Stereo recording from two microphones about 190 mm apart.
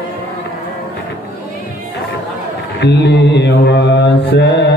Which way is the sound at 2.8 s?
65° left (ahead or behind).